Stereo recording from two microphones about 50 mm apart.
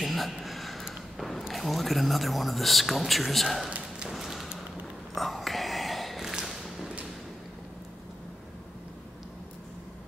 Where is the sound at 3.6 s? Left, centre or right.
Right.